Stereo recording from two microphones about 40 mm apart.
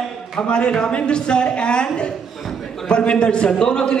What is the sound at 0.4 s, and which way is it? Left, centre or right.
A woman's voice, left.